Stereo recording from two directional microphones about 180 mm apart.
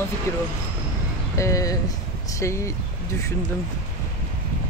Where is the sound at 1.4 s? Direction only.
20° left (ahead or behind).